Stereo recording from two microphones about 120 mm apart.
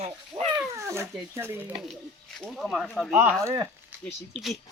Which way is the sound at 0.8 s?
20° right (ahead or behind).